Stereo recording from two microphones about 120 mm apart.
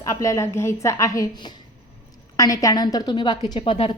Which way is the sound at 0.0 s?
25° left (ahead or behind).